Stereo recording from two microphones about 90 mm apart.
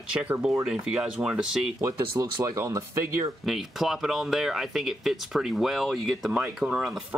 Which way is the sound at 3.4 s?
Centre (ahead or behind).